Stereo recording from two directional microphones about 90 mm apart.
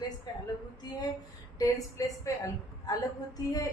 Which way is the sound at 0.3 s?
45° left (ahead or behind).